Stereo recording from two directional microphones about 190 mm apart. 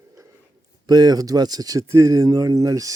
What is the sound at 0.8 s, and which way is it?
Speech, 20° right (ahead or behind).